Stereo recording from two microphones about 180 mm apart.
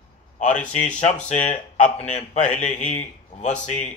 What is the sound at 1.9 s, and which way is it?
Speech, 40° left (ahead or behind).